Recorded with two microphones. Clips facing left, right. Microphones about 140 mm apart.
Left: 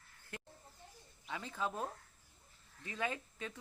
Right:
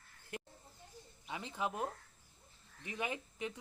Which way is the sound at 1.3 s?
20° right (ahead or behind).